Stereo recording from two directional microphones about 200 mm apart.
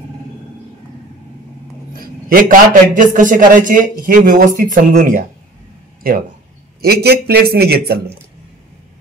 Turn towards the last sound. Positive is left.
turn(degrees=-50)  # may be behind; listen again after turning